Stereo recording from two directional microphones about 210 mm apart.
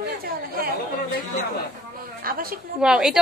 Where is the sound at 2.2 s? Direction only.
45° right (ahead or behind).